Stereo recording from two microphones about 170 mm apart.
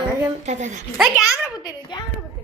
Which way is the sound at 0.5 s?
45° right (ahead or behind).